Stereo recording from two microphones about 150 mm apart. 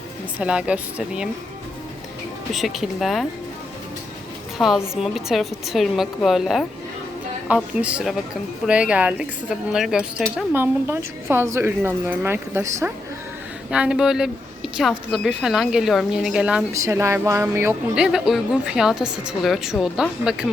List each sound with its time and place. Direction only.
0.3 s a woman's voice: 5° right (ahead or behind)
2.5 s speech: centre (ahead or behind)
4.5 s a woman's voice: centre (ahead or behind)
16.7 s a woman's voice: 20° right (ahead or behind)
17.9 s speech: 5° right (ahead or behind)